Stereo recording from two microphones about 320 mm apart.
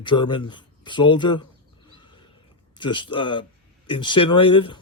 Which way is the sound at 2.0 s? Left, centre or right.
Centre.